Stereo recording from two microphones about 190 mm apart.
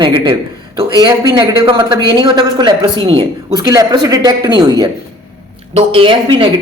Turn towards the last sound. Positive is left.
turn(degrees=-25)  # may be behind; listen again after turning